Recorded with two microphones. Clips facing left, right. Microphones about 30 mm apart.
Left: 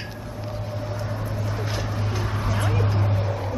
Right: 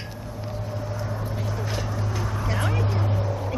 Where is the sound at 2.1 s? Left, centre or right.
Left.